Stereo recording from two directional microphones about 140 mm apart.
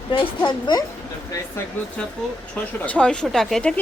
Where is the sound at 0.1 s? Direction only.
30° left (ahead or behind).